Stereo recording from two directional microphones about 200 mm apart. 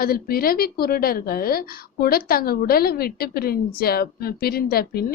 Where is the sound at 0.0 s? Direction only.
50° left (ahead or behind).